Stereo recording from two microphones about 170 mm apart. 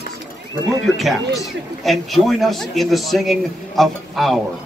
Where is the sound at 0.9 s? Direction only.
Centre (ahead or behind).